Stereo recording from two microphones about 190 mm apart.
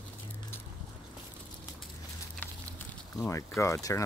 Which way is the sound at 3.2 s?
15° left (ahead or behind).